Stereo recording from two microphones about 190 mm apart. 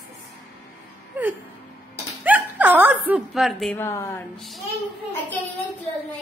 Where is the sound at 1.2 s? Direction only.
10° right (ahead or behind).